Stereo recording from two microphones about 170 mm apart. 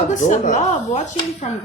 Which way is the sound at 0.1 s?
45° left (ahead or behind).